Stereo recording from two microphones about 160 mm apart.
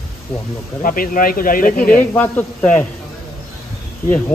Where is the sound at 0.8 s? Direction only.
60° left (ahead or behind).